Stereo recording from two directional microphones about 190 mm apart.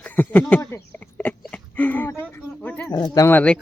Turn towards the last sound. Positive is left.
turn(degrees=10)  # may be behind; listen again after turning